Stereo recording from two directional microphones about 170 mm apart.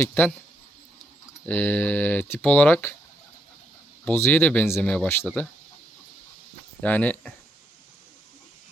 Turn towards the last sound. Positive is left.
turn(degrees=10)  # may be behind; listen again after turning